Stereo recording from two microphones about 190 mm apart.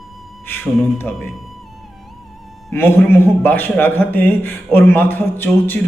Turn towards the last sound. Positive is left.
turn(degrees=10)  # may be behind; listen again after turning